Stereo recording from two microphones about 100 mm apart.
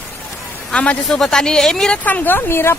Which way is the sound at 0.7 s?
15° left (ahead or behind).